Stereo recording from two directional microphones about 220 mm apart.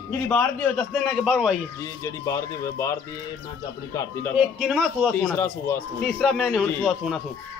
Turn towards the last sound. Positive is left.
turn(degrees=0)  # may be behind; listen again after turning